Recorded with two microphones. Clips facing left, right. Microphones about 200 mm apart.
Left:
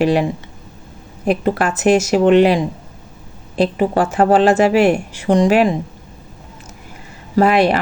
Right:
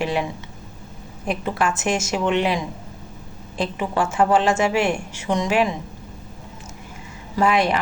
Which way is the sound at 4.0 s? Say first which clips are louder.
Left 5 dB; 60° left (ahead or behind).